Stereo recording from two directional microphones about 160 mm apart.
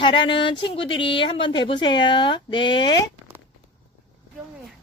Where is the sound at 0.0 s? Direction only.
30° left (ahead or behind).